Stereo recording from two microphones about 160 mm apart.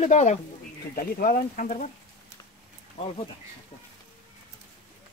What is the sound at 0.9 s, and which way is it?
Speech, 65° left (ahead or behind).